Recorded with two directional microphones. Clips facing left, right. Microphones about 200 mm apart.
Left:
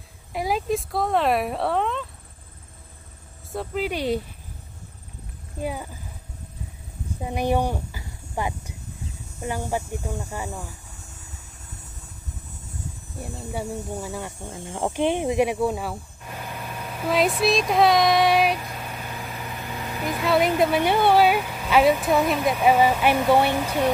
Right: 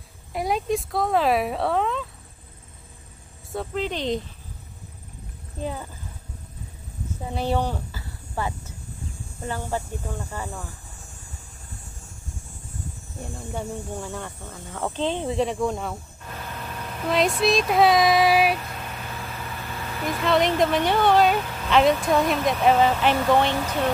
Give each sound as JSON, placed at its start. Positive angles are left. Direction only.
{"t": 0.3, "sound": "speech", "side_deg": 0}
{"t": 3.5, "sound": "speech", "side_deg": 5}
{"t": 5.6, "sound": "speech", "side_deg": 10}
{"t": 7.2, "sound": "speech", "side_deg": 15}
{"t": 13.5, "sound": "speech", "side_deg": 10}
{"t": 19.0, "sound": "vehicle", "side_deg": 15}
{"t": 20.1, "sound": "speech", "side_deg": 5}